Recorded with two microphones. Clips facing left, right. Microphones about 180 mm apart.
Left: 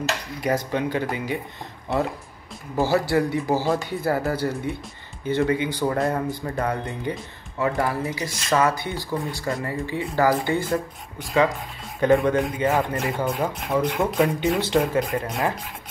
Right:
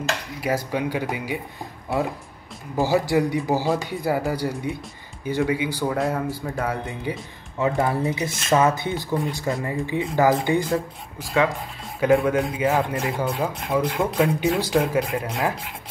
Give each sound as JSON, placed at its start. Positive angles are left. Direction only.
{"t": 0.4, "sound": "speech", "side_deg": -5}
{"t": 2.7, "sound": "speech", "side_deg": -15}
{"t": 7.5, "sound": "speech", "side_deg": -20}
{"t": 10.7, "sound": "speech", "side_deg": 0}